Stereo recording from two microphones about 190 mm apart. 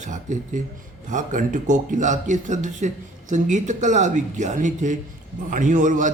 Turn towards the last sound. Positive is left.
turn(degrees=-40)  # may be behind; listen again after turning